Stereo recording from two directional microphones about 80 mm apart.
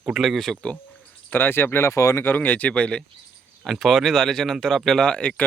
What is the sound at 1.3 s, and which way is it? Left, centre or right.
Speech, left.